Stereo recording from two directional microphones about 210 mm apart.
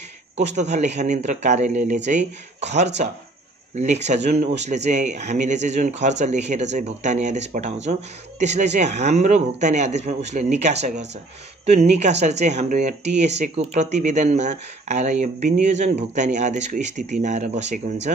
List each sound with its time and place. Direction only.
0.6 s speech: 35° right (ahead or behind)